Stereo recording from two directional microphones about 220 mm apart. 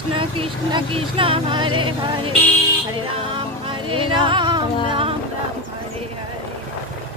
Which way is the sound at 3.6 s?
25° right (ahead or behind).